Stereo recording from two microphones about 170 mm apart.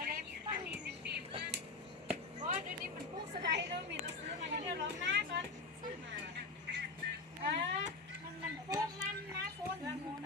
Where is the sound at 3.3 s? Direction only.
80° right.